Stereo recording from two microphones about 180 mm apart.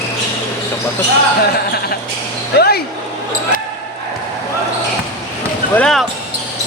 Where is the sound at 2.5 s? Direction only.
60° left (ahead or behind).